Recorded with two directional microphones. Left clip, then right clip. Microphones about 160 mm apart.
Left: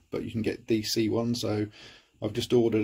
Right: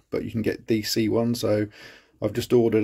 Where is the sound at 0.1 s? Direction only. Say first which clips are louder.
Right 5 dB; 35° right (ahead or behind).